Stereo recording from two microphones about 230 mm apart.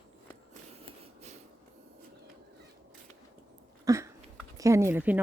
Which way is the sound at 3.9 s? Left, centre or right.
Centre.